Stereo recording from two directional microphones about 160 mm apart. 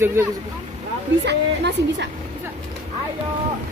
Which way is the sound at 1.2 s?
90° right.